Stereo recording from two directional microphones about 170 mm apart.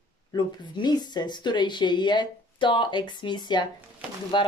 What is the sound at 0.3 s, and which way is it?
Speech, 25° left (ahead or behind).